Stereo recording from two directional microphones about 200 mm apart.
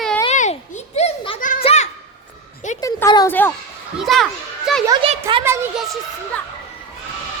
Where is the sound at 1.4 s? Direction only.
40° left (ahead or behind).